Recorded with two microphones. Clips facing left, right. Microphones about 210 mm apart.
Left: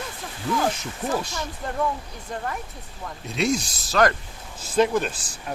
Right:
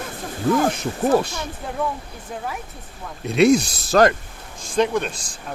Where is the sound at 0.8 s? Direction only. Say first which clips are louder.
Right 8 dB; 60° right (ahead or behind).